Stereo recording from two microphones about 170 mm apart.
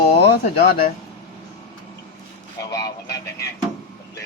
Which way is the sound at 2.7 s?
20° left (ahead or behind).